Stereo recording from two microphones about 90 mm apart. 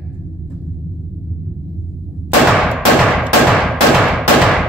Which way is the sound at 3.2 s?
Centre (ahead or behind).